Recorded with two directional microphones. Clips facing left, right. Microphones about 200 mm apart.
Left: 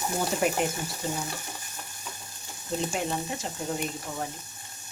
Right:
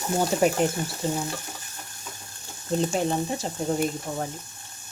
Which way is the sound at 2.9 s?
35° right (ahead or behind).